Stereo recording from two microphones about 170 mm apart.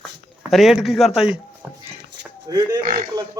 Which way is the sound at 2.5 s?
25° right (ahead or behind).